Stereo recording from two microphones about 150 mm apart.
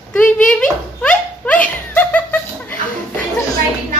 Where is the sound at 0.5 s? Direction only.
10° left (ahead or behind).